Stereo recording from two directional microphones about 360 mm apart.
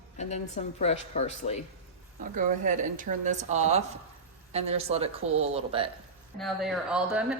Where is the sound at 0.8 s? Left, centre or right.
Centre.